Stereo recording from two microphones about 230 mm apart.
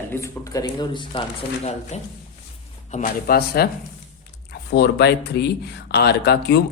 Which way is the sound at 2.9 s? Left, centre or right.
Left.